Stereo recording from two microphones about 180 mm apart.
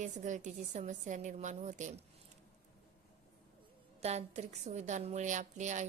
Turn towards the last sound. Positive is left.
turn(degrees=-40)  # may be behind; listen again after turning